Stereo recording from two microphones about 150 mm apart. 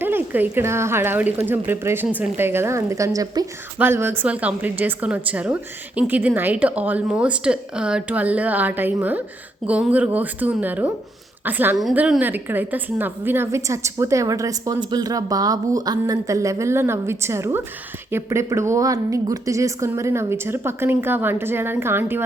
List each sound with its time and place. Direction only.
0.0 s a woman's voice: 15° right (ahead or behind)